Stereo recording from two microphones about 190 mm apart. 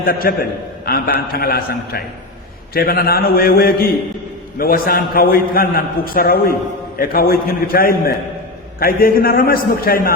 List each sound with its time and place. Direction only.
0.0 s a man's voice: 50° left (ahead or behind)